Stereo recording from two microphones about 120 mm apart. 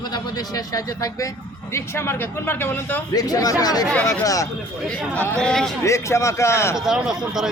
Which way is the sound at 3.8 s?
5° left (ahead or behind).